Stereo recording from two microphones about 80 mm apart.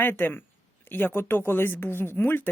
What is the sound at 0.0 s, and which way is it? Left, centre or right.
Speech, left.